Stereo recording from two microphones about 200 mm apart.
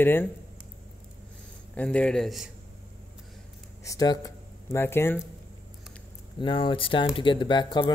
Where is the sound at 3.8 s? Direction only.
20° left (ahead or behind).